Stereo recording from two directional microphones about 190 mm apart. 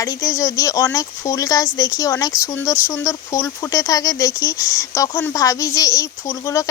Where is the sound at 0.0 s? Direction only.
15° left (ahead or behind).